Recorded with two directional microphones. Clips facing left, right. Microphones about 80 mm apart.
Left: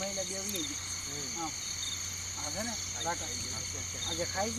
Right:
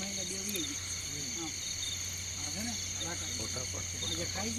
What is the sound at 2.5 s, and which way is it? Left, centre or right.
Speech, left.